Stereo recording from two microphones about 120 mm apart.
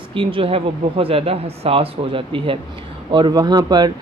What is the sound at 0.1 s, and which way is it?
Speech, 45° right (ahead or behind).